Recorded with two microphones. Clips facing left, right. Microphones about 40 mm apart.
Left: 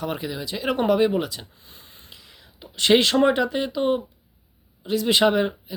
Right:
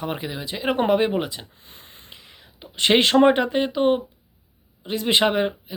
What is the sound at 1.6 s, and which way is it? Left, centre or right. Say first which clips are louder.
Speech: right 2 dB; right.